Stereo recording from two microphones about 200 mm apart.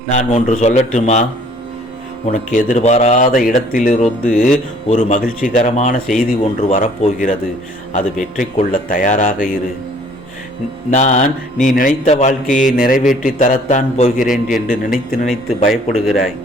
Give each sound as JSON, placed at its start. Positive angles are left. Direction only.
{"t": 0.1, "sound": "speech", "side_deg": 35}
{"t": 10.9, "sound": "speech", "side_deg": 35}
{"t": 15.3, "sound": "speech", "side_deg": 0}